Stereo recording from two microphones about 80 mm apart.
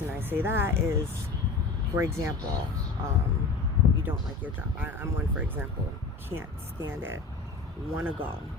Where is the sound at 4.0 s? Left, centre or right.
Right.